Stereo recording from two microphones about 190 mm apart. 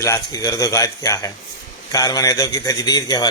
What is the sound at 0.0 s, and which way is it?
Speech, 15° left (ahead or behind).